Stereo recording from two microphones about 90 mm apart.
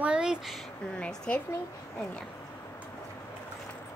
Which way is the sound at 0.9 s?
10° left (ahead or behind).